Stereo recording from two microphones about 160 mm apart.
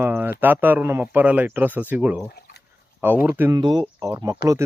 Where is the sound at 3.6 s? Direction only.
30° right (ahead or behind).